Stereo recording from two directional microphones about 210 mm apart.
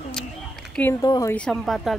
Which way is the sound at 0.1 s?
5° left (ahead or behind).